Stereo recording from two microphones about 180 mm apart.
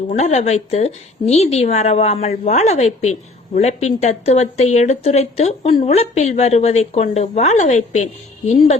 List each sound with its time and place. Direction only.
0.1 s a woman's voice: 40° left (ahead or behind)